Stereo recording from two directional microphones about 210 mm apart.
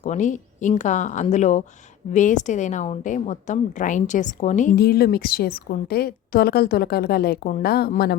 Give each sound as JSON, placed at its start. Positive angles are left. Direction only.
{"t": 0.0, "sound": "a woman's voice", "side_deg": 35}